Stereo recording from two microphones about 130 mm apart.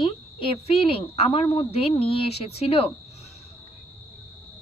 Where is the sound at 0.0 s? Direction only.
45° left (ahead or behind).